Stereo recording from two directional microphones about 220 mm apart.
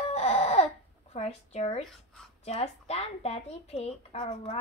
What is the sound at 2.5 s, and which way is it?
Speech, 30° left (ahead or behind).